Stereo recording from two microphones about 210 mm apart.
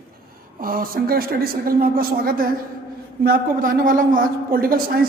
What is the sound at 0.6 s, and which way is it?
A woman's voice, 45° right (ahead or behind).